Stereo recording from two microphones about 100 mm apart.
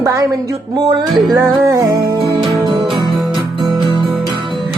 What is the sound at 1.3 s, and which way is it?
Music, 30° right (ahead or behind).